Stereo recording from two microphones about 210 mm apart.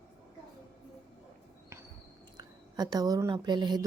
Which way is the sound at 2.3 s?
20° right (ahead or behind).